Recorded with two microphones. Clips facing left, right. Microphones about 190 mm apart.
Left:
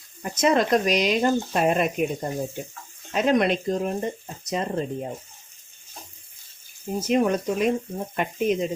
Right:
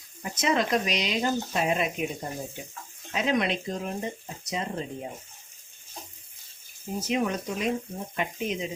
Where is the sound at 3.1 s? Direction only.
50° left (ahead or behind).